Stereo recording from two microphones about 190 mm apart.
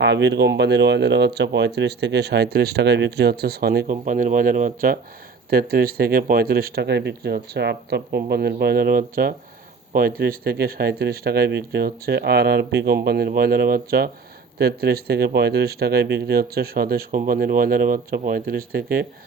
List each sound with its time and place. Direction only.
0.0 s speech: 65° right (ahead or behind)